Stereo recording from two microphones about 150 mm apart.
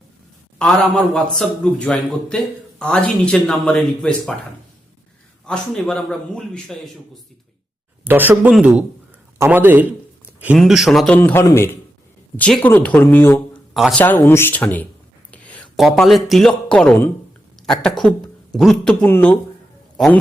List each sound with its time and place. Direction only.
0.6 s a man's voice: 5° left (ahead or behind)
5.5 s a man's voice: 5° left (ahead or behind)
8.0 s speech: 15° right (ahead or behind)
10.6 s a man's voice: centre (ahead or behind)
11.2 s speech: 15° left (ahead or behind)
15.3 s a sound: 10° left (ahead or behind)
15.7 s a man's voice: centre (ahead or behind)